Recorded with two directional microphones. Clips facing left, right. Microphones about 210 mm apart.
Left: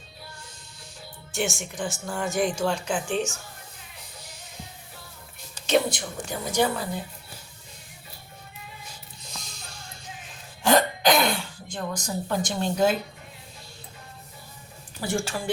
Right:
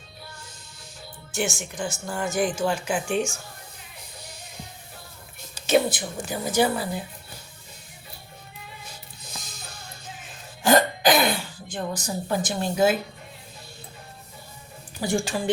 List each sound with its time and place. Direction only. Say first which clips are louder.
1.3 s speech: right 1 dB; centre (ahead or behind)
5.6 s speech: right 2 dB; 5° right (ahead or behind)
10.6 s hiccup: right 2 dB; 5° right (ahead or behind)
15.0 s speech: right 3 dB; 15° right (ahead or behind)